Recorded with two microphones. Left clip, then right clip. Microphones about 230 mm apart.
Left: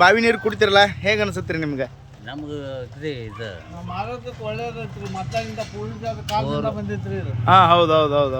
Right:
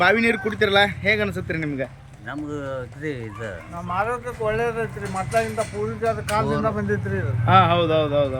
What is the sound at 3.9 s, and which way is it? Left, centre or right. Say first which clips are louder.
Speech: right 5 dB; right.